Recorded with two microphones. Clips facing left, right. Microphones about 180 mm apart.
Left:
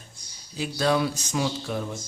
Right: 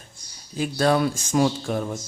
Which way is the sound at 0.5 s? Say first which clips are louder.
Right 3 dB; 50° right (ahead or behind).